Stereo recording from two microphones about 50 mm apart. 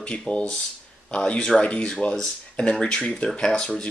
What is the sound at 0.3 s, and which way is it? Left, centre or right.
Speech, left.